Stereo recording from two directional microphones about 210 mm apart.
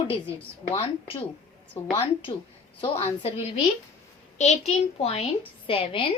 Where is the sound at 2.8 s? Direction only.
30° left (ahead or behind).